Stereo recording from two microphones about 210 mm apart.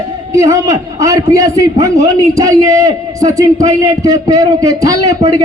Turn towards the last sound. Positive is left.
turn(degrees=-15)  # may be behind; listen again after turning